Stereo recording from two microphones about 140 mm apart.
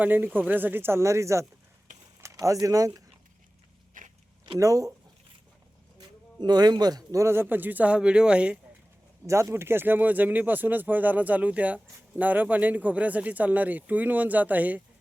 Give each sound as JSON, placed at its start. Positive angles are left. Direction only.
{"t": 0.0, "sound": "speech", "side_deg": -15}
{"t": 4.0, "sound": "a sound", "side_deg": -70}
{"t": 4.5, "sound": "speech", "side_deg": -25}
{"t": 6.4, "sound": "speech", "side_deg": -30}
{"t": 9.2, "sound": "speech", "side_deg": -20}